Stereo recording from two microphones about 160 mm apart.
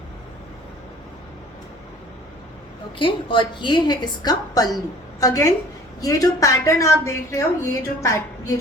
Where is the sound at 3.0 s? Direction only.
35° left (ahead or behind).